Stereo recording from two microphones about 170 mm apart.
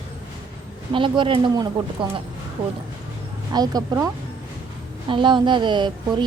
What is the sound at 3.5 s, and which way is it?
Speech, 20° right (ahead or behind).